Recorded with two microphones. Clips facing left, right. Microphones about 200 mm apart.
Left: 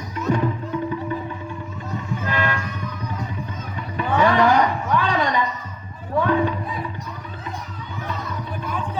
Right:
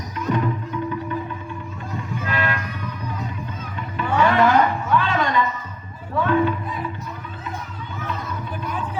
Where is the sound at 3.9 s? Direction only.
15° left (ahead or behind).